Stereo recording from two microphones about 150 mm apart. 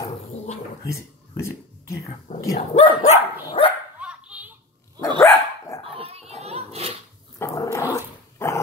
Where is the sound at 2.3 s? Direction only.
50° left (ahead or behind).